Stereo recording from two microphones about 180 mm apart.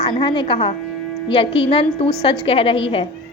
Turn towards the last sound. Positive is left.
turn(degrees=30)  # may be behind; listen again after turning